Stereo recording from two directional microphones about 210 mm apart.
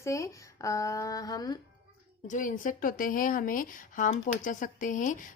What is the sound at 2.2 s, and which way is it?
Speech, 40° left (ahead or behind).